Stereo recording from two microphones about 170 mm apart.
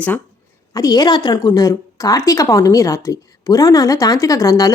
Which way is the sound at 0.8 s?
20° left (ahead or behind).